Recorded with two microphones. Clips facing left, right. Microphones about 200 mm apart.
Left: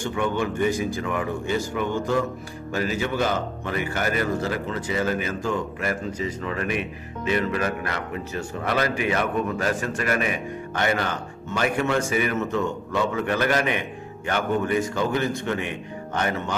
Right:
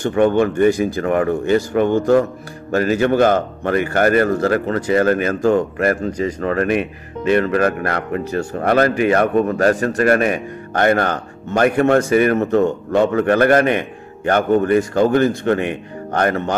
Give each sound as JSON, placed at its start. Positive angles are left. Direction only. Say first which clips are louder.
{"t": 0.0, "sound": "a man's voice", "louder": "right 10 dB", "side_deg": -60}